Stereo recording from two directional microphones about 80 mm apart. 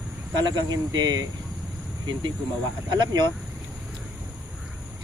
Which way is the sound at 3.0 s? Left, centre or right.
Right.